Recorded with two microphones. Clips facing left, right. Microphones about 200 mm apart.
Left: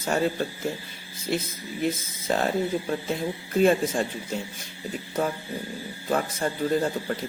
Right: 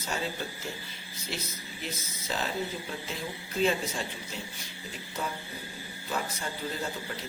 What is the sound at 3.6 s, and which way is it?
A man's voice, 50° left (ahead or behind).